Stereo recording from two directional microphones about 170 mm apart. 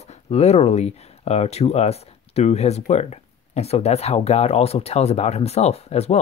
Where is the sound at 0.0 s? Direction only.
40° left (ahead or behind).